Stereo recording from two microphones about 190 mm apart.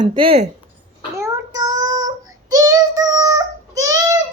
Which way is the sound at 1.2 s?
15° right (ahead or behind).